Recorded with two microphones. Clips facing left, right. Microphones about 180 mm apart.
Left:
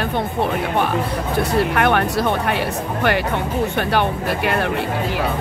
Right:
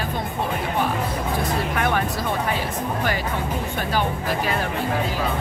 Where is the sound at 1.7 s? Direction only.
65° left (ahead or behind).